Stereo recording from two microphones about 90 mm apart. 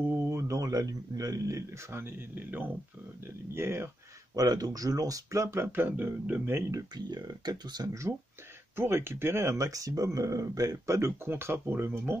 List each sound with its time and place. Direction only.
0.3 s speech: 35° right (ahead or behind)
4.4 s speech: 45° right (ahead or behind); by 6.6 s 20° right (ahead or behind)
6.9 s speech: 50° right (ahead or behind)
8.7 s speech: 25° right (ahead or behind)